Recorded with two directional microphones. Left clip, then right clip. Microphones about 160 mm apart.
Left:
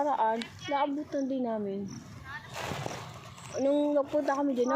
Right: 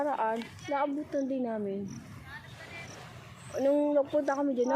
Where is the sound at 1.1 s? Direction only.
Centre (ahead or behind).